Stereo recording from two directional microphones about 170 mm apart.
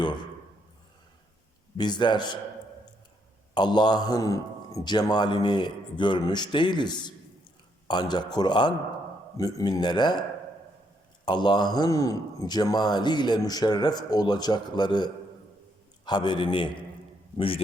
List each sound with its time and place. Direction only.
1.8 s a man's voice: 25° left (ahead or behind)
3.5 s a man's voice: 25° left (ahead or behind)
11.3 s a man's voice: 25° left (ahead or behind)